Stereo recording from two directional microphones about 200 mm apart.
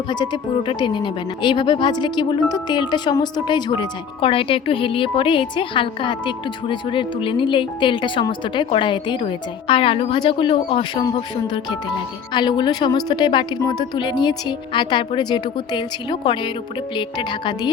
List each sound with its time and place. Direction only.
0.7 s a woman's voice: 25° left (ahead or behind)